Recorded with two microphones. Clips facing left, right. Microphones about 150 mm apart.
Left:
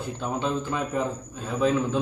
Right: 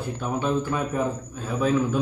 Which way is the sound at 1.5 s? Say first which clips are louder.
Right 1 dB; 25° left (ahead or behind).